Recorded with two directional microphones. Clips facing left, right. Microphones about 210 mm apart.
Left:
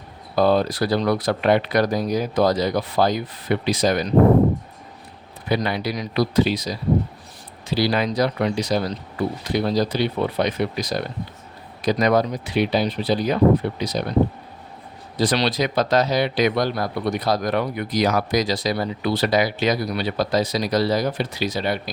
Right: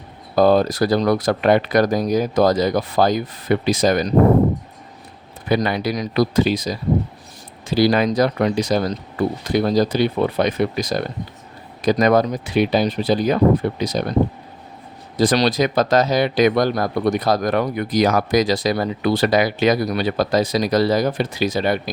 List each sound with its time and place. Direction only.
0.3 s speech: 45° right (ahead or behind)
5.5 s speech: 45° right (ahead or behind)
15.2 s speech: 45° right (ahead or behind)